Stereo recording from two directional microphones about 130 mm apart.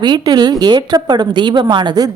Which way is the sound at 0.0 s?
35° right (ahead or behind).